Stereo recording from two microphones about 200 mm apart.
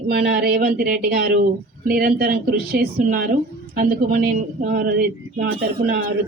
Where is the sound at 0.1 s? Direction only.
50° right (ahead or behind).